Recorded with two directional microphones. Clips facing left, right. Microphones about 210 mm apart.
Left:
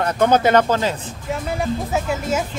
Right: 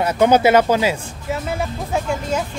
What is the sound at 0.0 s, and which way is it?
Speech, 10° right (ahead or behind).